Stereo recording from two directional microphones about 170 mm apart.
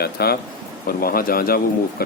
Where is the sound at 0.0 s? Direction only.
65° left (ahead or behind).